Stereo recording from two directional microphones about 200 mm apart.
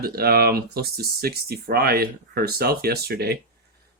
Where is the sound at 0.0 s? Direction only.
50° right (ahead or behind).